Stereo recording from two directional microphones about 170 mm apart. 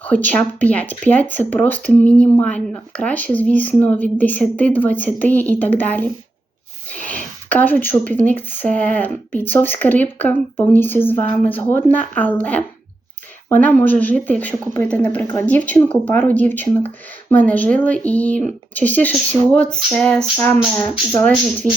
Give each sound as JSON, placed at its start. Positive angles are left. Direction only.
{"t": 0.0, "sound": "speech", "side_deg": 10}
{"t": 6.9, "sound": "a sound", "side_deg": 10}
{"t": 8.2, "sound": "speech", "side_deg": 10}